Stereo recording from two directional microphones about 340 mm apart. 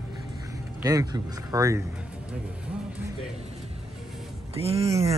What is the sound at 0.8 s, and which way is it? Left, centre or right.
Speech, centre.